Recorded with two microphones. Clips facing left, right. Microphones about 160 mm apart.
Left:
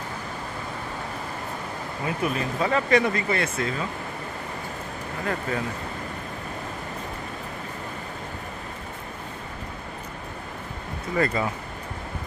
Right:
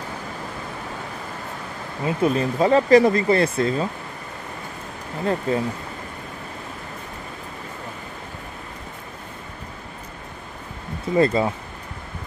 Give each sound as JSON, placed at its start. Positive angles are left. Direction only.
{"t": 2.0, "sound": "speech", "side_deg": -30}
{"t": 5.2, "sound": "speech", "side_deg": -30}
{"t": 11.1, "sound": "speech", "side_deg": -25}